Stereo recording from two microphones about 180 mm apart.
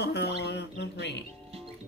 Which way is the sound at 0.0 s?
65° left (ahead or behind).